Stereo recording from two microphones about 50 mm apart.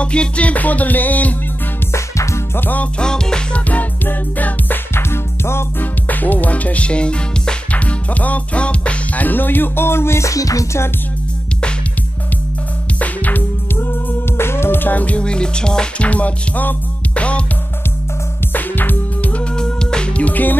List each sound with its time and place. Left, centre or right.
0.0 s music: left
1.9 s music: left
2.5 s music: left
3.0 s music: centre
3.5 s music: left
4.9 s music: left
5.8 s speech: left
13.0 s music: left
13.7 s music: left
15.2 s music: centre
16.1 s music: left
18.5 s music: left
19.5 s music: centre; by 20.5 s left